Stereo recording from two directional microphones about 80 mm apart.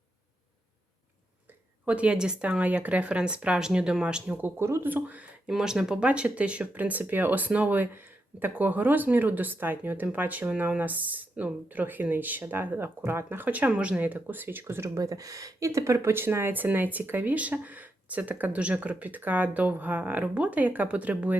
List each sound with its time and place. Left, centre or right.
1.8 s speech: centre
4.4 s speech: right
5.5 s speech: centre; by 14.9 s right
14.9 s speech: right; by 21.3 s centre